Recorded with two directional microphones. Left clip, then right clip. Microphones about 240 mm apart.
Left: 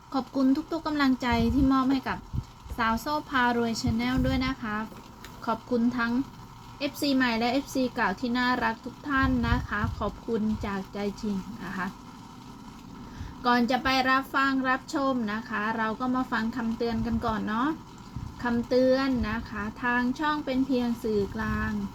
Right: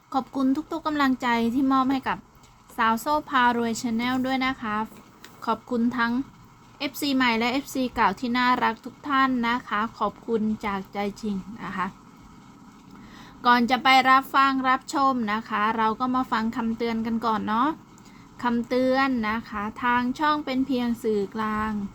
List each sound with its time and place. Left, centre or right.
0.1 s a woman's voice: centre
13.4 s a woman's voice: right